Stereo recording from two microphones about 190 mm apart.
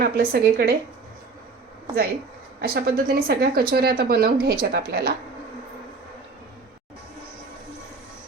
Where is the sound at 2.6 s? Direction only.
55° right (ahead or behind).